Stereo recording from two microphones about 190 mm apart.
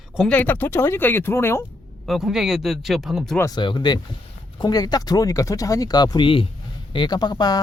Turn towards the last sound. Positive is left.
turn(degrees=20)  # may be behind; listen again after turning